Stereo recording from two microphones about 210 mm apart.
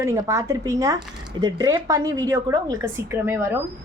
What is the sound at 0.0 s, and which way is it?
A woman's voice, 15° right (ahead or behind).